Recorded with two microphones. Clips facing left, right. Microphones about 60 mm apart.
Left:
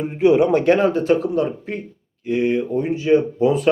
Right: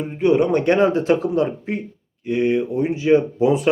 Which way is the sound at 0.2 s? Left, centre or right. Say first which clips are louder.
Left 2 dB; centre.